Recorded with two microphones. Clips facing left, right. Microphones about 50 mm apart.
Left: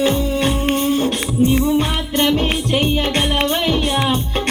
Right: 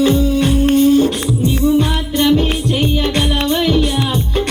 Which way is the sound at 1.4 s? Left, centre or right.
Left.